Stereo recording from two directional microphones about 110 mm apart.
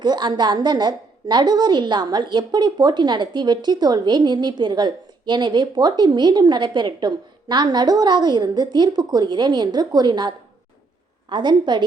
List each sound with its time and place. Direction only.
0.0 s a woman's voice: 40° right (ahead or behind)